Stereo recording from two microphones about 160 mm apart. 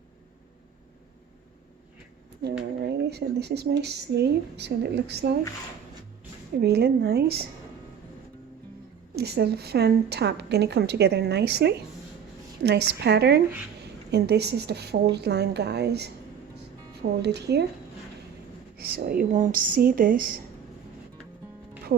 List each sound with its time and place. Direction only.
2.4 s a woman's voice: 80° right
6.6 s a woman's voice: 85° right
9.1 s a woman's voice: 90° right
18.8 s a woman's voice: 75° right (ahead or behind)